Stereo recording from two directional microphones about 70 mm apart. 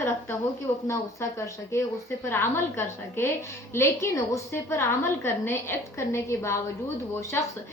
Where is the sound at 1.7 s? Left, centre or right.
Left.